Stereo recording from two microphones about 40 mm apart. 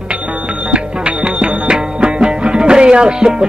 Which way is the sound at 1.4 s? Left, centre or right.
Right.